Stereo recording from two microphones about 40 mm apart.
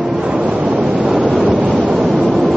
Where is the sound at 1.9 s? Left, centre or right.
Centre.